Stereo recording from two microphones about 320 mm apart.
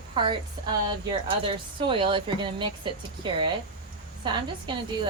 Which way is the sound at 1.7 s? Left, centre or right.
Centre.